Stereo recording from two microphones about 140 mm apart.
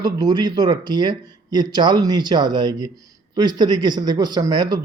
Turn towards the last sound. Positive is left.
turn(degrees=-30)  # may be behind; listen again after turning